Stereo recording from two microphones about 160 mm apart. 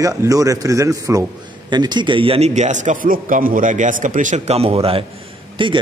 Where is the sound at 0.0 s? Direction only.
20° right (ahead or behind).